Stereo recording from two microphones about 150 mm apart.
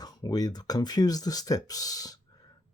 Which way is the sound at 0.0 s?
25° left (ahead or behind).